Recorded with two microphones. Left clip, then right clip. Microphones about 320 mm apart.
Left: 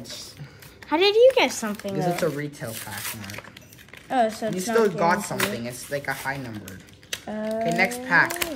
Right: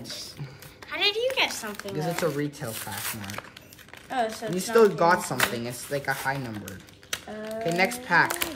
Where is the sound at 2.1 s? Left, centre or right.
Centre.